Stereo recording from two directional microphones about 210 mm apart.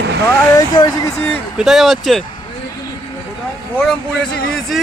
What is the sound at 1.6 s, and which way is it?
Speech, centre (ahead or behind).